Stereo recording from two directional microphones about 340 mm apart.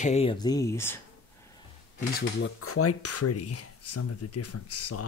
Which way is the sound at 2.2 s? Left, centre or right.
Left.